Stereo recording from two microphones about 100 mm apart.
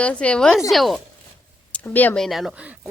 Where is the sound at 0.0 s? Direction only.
10° left (ahead or behind).